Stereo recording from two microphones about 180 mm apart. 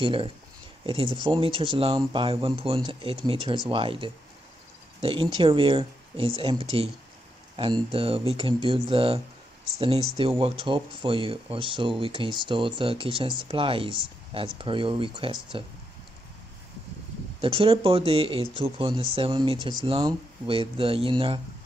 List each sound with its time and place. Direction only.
0.0 s speech: 30° right (ahead or behind)
7.5 s speech: 30° right (ahead or behind)
17.4 s speech: 30° right (ahead or behind)